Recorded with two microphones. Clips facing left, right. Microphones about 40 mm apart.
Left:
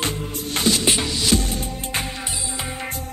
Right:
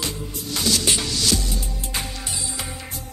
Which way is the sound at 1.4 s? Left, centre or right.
Left.